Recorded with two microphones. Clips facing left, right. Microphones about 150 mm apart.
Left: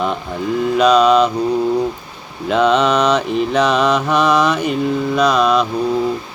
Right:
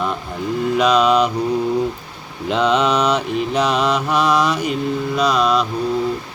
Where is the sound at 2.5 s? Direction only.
55° left (ahead or behind).